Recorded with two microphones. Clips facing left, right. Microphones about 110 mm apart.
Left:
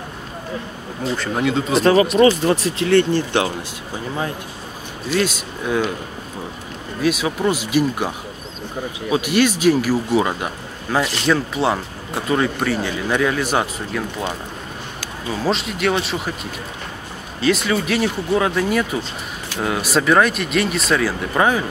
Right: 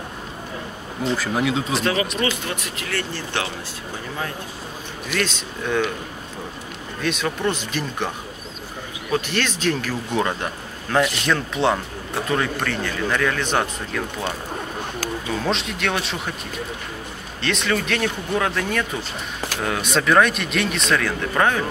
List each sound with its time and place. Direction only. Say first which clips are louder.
1.0 s speech: left 1 dB; 5° right (ahead or behind)
2.1 s speech: left 11 dB; 35° left (ahead or behind)
5.2 s speech: left 3 dB; 10° left (ahead or behind)
7.0 s speech: left 5 dB; 5° left (ahead or behind)
9.1 s speech: left 6 dB; 10° left (ahead or behind)
15.3 s speech: left 5 dB; centre (ahead or behind)
17.4 s speech: left 5 dB; 5° left (ahead or behind)